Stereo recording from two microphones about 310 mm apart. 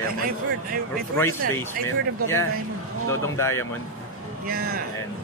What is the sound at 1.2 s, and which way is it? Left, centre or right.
Speech, centre.